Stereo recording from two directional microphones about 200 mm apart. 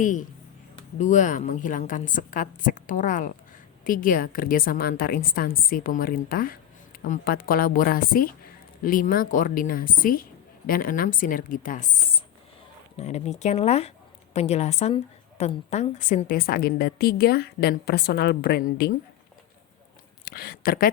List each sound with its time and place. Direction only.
0.0 s a woman's voice: 40° left (ahead or behind)
13.0 s a woman's voice: 35° left (ahead or behind); by 18.9 s 50° left (ahead or behind)
20.2 s speech: 50° left (ahead or behind)